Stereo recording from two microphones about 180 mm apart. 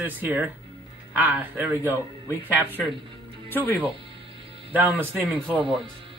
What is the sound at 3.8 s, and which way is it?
Music, 30° right (ahead or behind).